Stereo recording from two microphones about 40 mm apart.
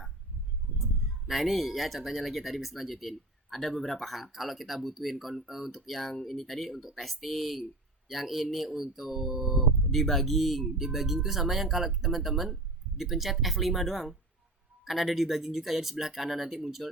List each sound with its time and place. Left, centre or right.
1.3 s speech: centre
9.9 s speech: centre